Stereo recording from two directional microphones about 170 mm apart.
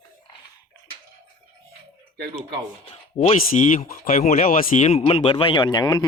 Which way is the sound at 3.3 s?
50° left (ahead or behind).